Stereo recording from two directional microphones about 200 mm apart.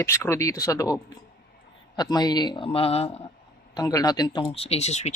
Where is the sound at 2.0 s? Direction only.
20° left (ahead or behind).